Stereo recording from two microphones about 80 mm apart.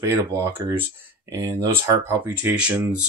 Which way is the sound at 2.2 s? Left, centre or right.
Centre.